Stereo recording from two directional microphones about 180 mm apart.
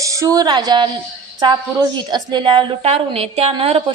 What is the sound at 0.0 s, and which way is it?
A woman's voice, 20° right (ahead or behind).